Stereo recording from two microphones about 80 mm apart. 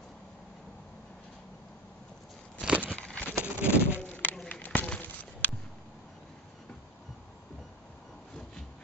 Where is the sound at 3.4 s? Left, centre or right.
Centre.